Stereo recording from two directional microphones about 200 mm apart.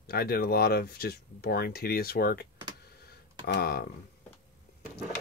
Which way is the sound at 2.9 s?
50° left (ahead or behind).